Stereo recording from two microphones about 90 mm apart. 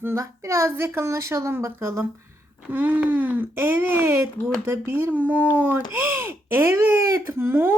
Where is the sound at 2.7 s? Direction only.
20° right (ahead or behind).